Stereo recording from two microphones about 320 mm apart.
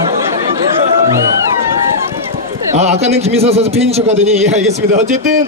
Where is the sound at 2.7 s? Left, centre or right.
Centre.